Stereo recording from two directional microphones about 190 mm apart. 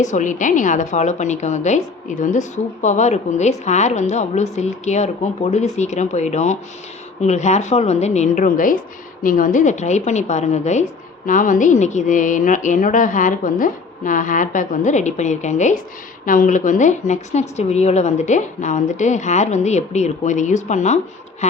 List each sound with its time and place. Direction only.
0.0 s a woman's voice: 40° left (ahead or behind)